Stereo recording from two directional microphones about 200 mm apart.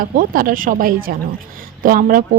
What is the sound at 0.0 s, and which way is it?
Speech, 45° right (ahead or behind).